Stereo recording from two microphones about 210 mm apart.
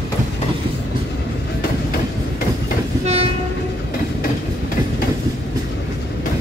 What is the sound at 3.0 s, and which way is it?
Train, 30° right (ahead or behind).